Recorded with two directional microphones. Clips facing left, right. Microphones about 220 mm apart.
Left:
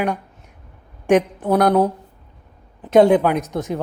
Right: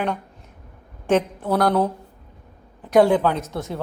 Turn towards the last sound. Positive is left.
turn(degrees=15)  # may be behind; listen again after turning